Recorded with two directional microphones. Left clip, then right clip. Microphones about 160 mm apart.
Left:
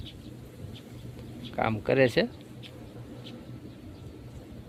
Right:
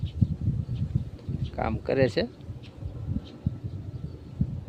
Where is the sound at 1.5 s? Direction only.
5° right (ahead or behind).